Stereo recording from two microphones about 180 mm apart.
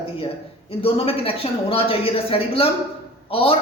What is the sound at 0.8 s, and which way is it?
A man's voice, 30° left (ahead or behind).